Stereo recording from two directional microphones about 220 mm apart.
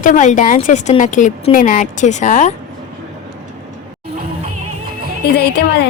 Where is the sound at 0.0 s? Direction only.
35° left (ahead or behind).